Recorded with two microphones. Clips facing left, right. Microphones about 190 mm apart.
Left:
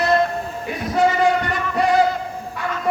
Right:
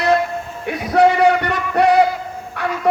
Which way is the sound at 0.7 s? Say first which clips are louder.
Right 5 dB; 65° right (ahead or behind).